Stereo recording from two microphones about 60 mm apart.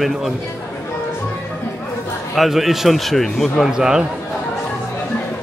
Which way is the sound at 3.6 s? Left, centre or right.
Centre.